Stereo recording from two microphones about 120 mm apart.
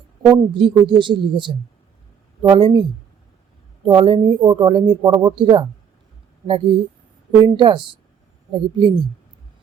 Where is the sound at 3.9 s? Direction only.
40° right (ahead or behind).